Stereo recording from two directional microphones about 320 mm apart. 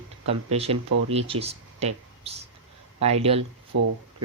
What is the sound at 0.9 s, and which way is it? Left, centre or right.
Speech, right.